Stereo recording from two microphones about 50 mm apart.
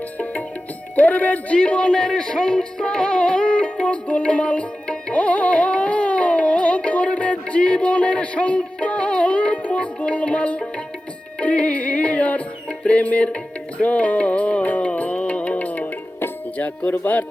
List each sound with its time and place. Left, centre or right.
0.9 s music: left
16.6 s speech: left